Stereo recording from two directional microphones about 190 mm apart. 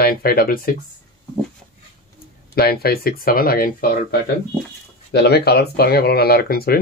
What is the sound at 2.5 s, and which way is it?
Speech, 55° left (ahead or behind).